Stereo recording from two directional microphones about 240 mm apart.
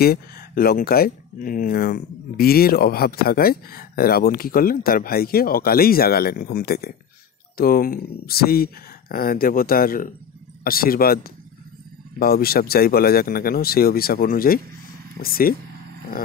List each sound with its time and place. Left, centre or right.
0.0 s speech: left